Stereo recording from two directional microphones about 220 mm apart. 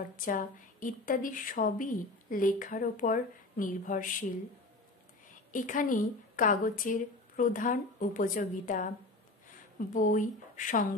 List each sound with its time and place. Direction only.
0.1 s a woman's voice: 40° left (ahead or behind)
5.5 s a woman's voice: 35° left (ahead or behind)